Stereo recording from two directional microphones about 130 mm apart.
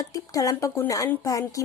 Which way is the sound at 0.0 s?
30° left (ahead or behind).